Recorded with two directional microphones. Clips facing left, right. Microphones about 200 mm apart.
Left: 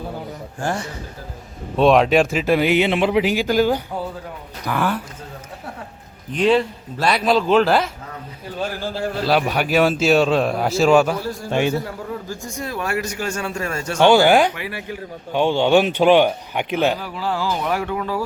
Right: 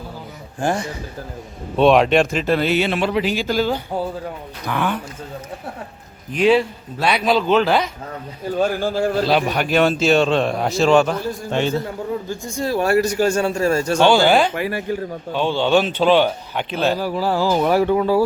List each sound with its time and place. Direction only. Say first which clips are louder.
0.6 s a man's voice: right 3 dB; 15° right (ahead or behind)
1.7 s speech: right 1 dB; centre (ahead or behind)
6.3 s a man's voice: right 1 dB; 5° right (ahead or behind)
8.6 s speech: right 5 dB; 45° right (ahead or behind)
9.3 s a man's voice: even; 5° left (ahead or behind)
12.3 s a man's voice: right 6 dB; 30° right (ahead or behind)
14.0 s speech: left 2 dB; 15° left (ahead or behind)
14.5 s speech: right 7 dB; 45° right (ahead or behind)
15.3 s speech: left 2 dB; 15° left (ahead or behind)
17.0 s a man's voice: right 5 dB; 40° right (ahead or behind)